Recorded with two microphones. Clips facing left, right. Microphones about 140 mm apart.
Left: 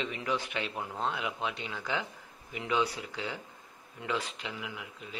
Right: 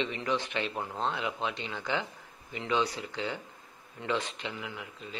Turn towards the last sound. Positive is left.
turn(degrees=5)  # may be behind; listen again after turning